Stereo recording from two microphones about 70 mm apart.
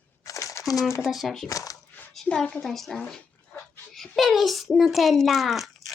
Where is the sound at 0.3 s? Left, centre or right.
Left.